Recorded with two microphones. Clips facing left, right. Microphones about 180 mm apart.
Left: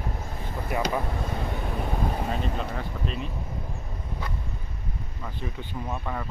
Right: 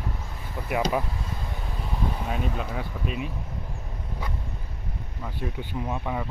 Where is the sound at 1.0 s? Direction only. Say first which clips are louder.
Left 5 dB; 60° left (ahead or behind).